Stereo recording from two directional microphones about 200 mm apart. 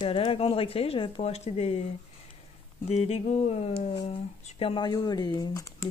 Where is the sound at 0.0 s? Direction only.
25° left (ahead or behind).